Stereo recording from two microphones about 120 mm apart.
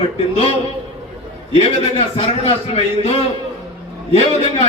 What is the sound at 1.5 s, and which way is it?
A man's voice, 55° left (ahead or behind).